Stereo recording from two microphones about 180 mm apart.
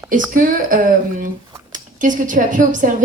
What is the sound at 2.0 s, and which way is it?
Speech, 45° right (ahead or behind).